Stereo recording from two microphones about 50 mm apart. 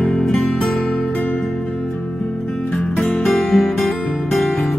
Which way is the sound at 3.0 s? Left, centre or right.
Centre.